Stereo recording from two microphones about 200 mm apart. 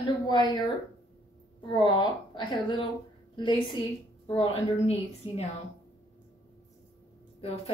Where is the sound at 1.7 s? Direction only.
25° left (ahead or behind).